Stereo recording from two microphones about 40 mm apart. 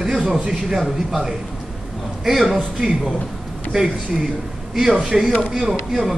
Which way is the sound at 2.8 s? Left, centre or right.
Centre.